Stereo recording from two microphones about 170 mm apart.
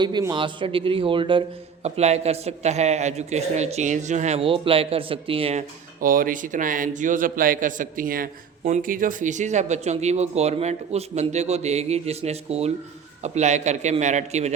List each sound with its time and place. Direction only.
0.0 s a man's voice: 25° right (ahead or behind)
6.0 s a man's voice: 55° right (ahead or behind)